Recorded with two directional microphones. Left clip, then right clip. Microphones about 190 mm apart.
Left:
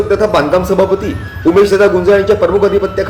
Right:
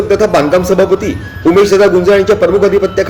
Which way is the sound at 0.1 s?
25° right (ahead or behind).